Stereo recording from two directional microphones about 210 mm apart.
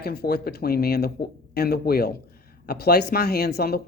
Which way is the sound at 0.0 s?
50° left (ahead or behind).